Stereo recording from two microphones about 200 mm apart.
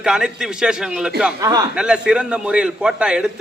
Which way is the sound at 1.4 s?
15° right (ahead or behind).